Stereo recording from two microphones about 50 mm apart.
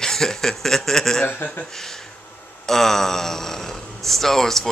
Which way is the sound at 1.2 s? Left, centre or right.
Left.